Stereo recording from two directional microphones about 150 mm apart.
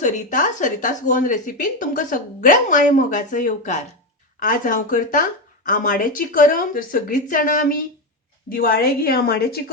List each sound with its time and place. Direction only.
0.0 s speech: 60° left (ahead or behind)
8.4 s a woman's voice: 80° left